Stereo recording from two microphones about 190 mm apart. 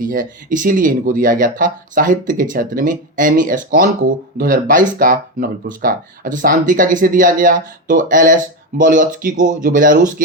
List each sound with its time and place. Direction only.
0.0 s speech: 45° right (ahead or behind)